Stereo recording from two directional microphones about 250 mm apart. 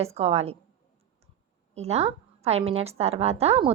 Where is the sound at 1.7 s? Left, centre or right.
Right.